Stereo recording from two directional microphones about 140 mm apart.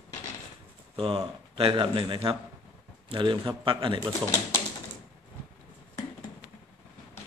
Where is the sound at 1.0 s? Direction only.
45° right (ahead or behind).